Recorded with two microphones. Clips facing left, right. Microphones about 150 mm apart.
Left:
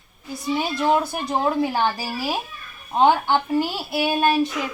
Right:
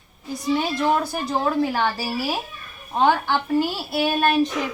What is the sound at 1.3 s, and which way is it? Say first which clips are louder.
A woman's voice: even; 20° left (ahead or behind).